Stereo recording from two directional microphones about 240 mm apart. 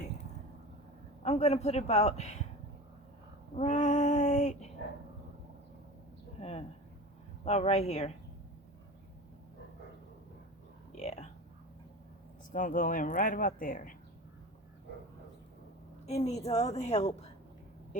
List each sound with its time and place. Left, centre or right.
1.2 s a man's voice: left
3.5 s child singing: left
6.4 s a man's voice: left
10.9 s speech: left
12.5 s speech: left
16.0 s a man's voice: left